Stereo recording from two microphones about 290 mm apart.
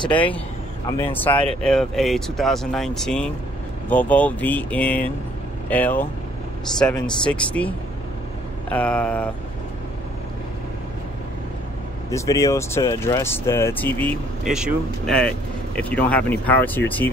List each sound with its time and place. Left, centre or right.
0.0 s speech: centre
0.9 s speech: centre
12.1 s speech: centre